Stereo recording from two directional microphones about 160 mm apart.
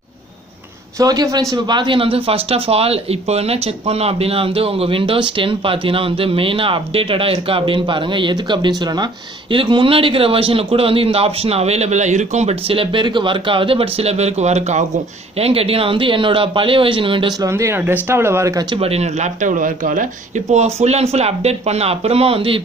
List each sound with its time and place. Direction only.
0.9 s a man's voice: 20° right (ahead or behind)
18.8 s speech: 40° right (ahead or behind)